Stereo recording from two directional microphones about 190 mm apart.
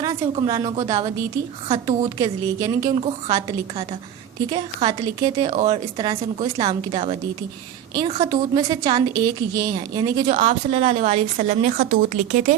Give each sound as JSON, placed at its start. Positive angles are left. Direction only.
{"t": 0.0, "sound": "a woman's voice", "side_deg": -20}